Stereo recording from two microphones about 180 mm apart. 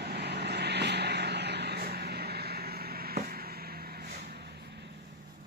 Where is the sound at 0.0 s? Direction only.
65° right (ahead or behind).